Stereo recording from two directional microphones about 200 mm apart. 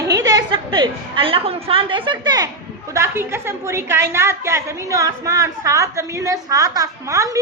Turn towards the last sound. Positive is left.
turn(degrees=-15)  # may be behind; listen again after turning